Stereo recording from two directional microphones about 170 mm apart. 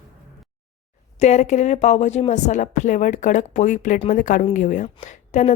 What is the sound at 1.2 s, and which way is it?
Speech, 45° left (ahead or behind).